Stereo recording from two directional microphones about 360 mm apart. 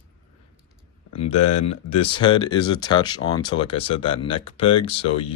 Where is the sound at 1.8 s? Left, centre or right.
Centre.